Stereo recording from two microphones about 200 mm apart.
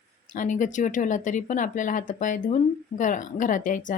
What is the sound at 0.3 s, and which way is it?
Speech, 40° left (ahead or behind).